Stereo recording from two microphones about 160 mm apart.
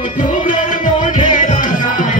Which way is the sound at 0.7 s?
55° left (ahead or behind).